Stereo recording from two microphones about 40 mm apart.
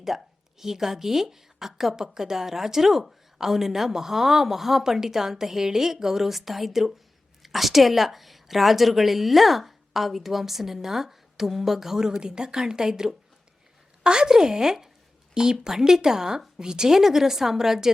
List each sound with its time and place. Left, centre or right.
0.1 s a woman's voice: centre